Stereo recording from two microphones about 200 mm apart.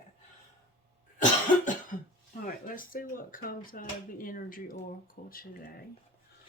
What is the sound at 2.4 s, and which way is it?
Speech, 45° left (ahead or behind).